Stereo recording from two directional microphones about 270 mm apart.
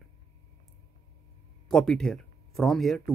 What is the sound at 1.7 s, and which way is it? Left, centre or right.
Speech, centre.